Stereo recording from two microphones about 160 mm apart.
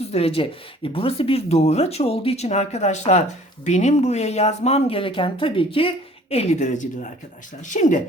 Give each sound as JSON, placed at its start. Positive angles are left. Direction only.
{"t": 0.1, "sound": "speech", "side_deg": 40}